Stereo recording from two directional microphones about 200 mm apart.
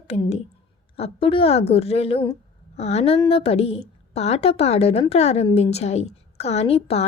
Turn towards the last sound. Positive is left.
turn(degrees=30)  # may be behind; listen again after turning